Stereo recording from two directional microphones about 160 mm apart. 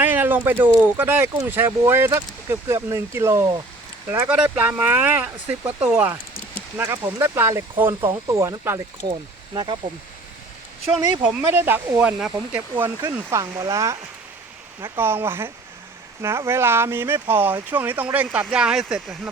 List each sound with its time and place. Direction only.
0.0 s a sound: 10° right (ahead or behind)
0.7 s speech: 15° right (ahead or behind)
11.2 s speech: 10° right (ahead or behind)
12.8 s speech: 20° right (ahead or behind); by 19.3 s centre (ahead or behind)